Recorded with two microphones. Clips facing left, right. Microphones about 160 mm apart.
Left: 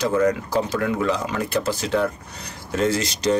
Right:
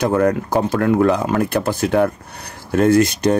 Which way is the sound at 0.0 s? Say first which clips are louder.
Right 3 dB; 55° right (ahead or behind).